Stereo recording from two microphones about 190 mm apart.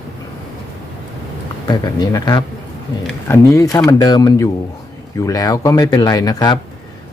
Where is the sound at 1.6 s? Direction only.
20° left (ahead or behind).